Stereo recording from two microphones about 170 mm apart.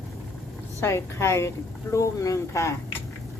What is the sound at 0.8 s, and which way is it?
A woman's voice, 15° left (ahead or behind).